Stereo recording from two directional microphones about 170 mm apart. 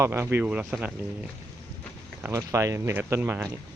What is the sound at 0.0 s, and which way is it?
Speech, 15° right (ahead or behind).